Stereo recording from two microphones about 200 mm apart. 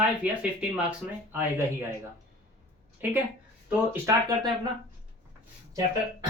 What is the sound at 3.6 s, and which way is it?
Speech, 10° right (ahead or behind).